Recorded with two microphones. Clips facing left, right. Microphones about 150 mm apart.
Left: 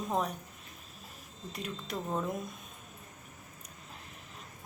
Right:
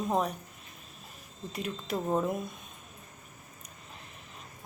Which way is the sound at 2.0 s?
25° right (ahead or behind).